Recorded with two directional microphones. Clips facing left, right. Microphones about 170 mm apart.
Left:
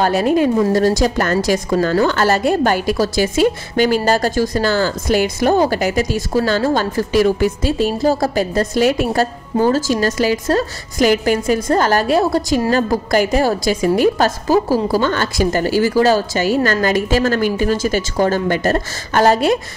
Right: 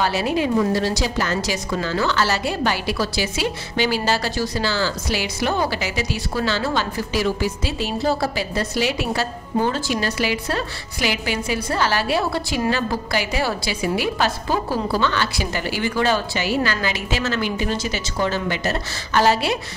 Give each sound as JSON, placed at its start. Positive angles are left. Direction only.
{"t": 0.0, "sound": "a woman's voice", "side_deg": 50}